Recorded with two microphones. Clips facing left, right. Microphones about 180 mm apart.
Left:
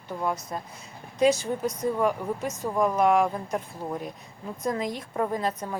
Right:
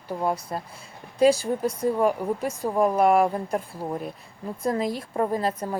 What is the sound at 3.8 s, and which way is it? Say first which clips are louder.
Speech: right 2 dB; 10° right (ahead or behind).